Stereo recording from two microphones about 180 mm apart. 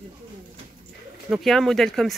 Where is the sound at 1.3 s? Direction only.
Centre (ahead or behind).